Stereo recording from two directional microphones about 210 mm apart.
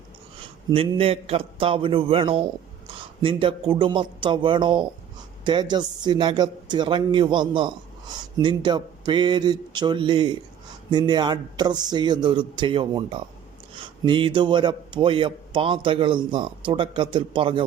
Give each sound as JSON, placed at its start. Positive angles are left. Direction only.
{"t": 0.7, "sound": "a man's voice", "side_deg": -25}